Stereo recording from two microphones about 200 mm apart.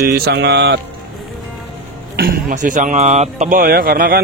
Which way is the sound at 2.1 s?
50° right (ahead or behind).